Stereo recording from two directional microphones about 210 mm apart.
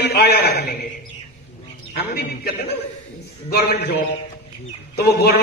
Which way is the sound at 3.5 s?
50° left (ahead or behind).